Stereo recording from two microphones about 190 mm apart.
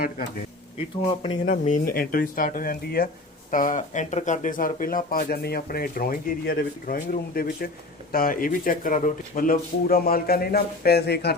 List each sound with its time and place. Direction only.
1.5 s speech: 45° left (ahead or behind)